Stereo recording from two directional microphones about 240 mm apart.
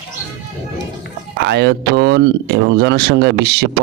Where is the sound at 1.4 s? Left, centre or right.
Right.